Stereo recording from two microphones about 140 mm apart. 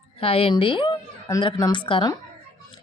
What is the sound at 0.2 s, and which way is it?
Speech, 45° left (ahead or behind).